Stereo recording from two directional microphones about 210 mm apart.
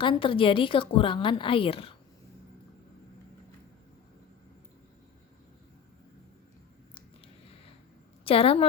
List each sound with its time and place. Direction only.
0.0 s a woman's voice: 25° left (ahead or behind)
8.2 s a woman's voice: 25° left (ahead or behind)